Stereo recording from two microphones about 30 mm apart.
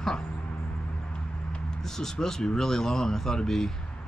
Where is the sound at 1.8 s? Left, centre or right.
Centre.